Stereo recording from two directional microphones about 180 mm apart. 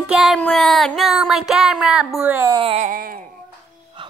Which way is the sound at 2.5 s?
35° right (ahead or behind).